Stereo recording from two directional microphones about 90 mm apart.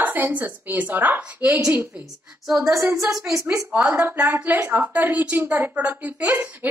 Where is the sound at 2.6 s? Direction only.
35° right (ahead or behind).